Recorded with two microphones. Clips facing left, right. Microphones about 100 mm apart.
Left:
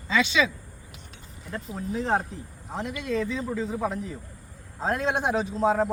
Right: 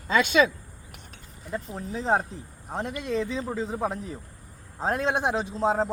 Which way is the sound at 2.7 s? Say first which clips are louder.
Even; 30° right (ahead or behind).